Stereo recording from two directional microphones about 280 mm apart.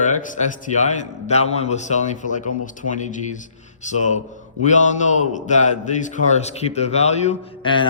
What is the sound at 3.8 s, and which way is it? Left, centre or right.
A man's voice, left.